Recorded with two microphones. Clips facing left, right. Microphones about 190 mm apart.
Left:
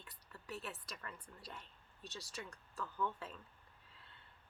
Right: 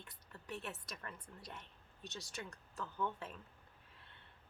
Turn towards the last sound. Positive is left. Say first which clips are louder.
# even
turn(degrees=-25)  # may be behind; listen again after turning